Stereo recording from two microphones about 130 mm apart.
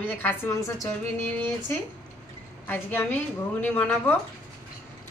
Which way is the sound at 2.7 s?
15° left (ahead or behind).